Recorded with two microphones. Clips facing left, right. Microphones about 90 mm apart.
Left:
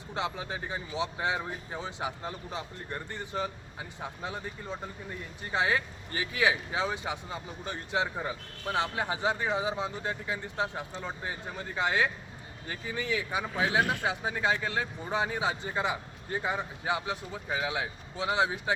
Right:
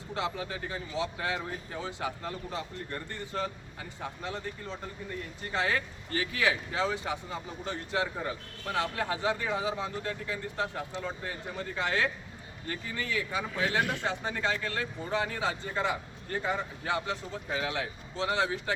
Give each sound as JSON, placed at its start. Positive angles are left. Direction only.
{"t": 0.1, "sound": "speech", "side_deg": 20}